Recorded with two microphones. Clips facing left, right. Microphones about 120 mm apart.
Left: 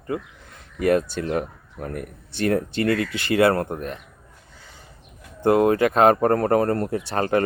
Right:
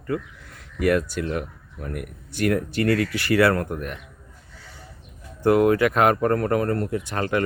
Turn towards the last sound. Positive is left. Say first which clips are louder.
# left 3 dB
turn(degrees=35)  # may be behind; listen again after turning